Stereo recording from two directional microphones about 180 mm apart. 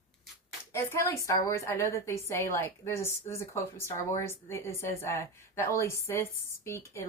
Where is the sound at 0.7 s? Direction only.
15° left (ahead or behind).